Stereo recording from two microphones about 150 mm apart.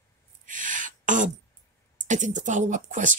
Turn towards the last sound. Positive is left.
turn(degrees=-55)  # may be behind; listen again after turning